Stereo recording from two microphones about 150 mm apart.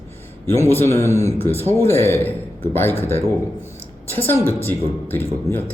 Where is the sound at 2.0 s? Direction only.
15° left (ahead or behind).